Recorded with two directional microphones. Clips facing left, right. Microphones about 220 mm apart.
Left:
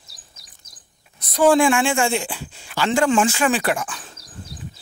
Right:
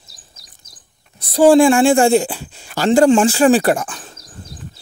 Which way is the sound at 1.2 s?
30° right (ahead or behind).